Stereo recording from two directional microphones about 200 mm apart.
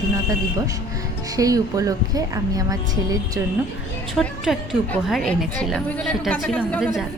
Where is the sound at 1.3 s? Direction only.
15° right (ahead or behind).